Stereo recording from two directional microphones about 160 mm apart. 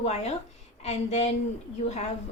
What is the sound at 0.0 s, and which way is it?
A woman's voice, 45° left (ahead or behind).